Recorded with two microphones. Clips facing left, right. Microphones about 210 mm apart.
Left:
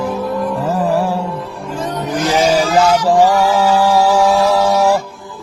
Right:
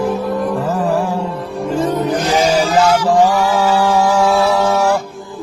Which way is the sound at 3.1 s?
10° left (ahead or behind).